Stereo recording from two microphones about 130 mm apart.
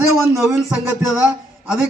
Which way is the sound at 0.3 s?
20° right (ahead or behind).